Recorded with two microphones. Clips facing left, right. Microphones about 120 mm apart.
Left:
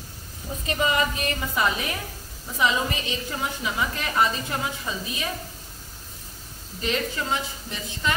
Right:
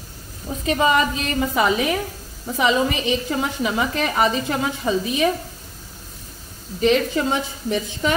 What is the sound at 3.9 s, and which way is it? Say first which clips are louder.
A woman's voice: right 5 dB; 75° right (ahead or behind).